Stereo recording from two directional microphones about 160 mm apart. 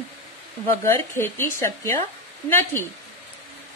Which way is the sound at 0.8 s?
15° left (ahead or behind).